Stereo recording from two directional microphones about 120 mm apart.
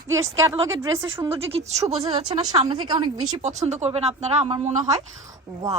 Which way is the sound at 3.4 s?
70° right (ahead or behind).